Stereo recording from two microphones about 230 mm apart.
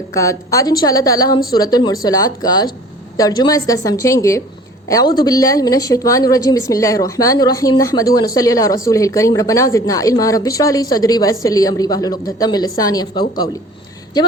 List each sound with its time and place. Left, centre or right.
0.1 s a woman's voice: centre